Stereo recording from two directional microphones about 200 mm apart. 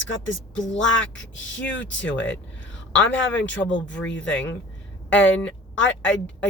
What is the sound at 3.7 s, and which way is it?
Speech, 70° left (ahead or behind).